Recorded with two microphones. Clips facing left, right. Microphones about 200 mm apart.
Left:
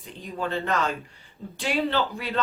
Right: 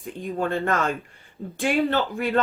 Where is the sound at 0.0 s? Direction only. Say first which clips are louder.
Right 5 dB; 50° right (ahead or behind).